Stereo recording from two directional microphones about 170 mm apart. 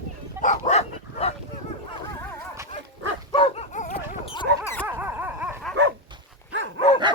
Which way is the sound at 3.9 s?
35° left (ahead or behind).